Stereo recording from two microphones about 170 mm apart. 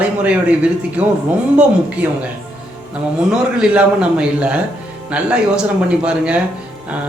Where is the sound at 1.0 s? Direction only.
5° right (ahead or behind).